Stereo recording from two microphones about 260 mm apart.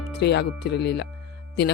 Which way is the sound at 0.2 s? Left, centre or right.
Left.